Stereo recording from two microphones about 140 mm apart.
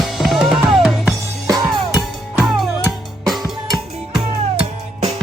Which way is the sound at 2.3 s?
Centre (ahead or behind).